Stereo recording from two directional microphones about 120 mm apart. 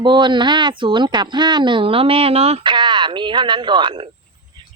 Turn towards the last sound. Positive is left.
turn(degrees=-40)  # may be behind; listen again after turning